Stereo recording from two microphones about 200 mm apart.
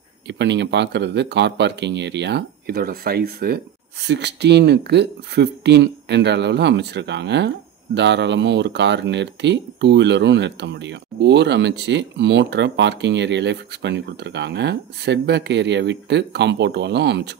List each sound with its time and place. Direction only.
0.3 s speech: 60° right (ahead or behind)